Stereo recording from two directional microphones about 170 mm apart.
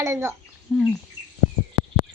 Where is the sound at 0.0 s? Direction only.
15° right (ahead or behind).